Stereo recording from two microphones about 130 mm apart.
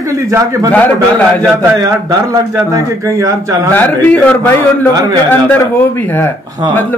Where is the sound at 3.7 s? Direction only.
15° left (ahead or behind).